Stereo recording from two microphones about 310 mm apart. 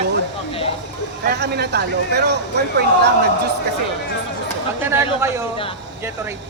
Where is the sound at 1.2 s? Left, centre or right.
Right.